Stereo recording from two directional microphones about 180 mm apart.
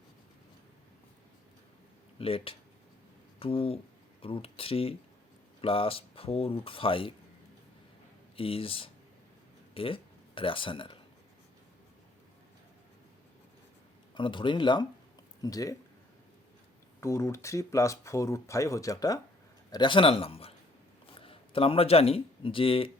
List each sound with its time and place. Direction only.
2.1 s speech: 30° left (ahead or behind)
8.4 s speech: 30° left (ahead or behind)
14.2 s a man's voice: 25° left (ahead or behind)
17.0 s a man's voice: 15° left (ahead or behind)